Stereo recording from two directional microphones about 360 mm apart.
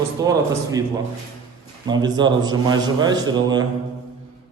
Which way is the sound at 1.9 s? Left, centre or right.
Centre.